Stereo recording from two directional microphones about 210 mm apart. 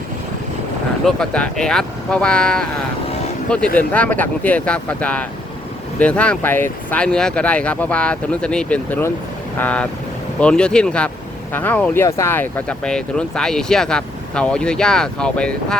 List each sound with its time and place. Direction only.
1.0 s speech: 5° left (ahead or behind)
3.8 s speech: 5° left (ahead or behind)